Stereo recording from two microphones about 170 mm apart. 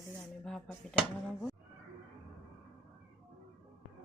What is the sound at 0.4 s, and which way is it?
Speech, 5° left (ahead or behind).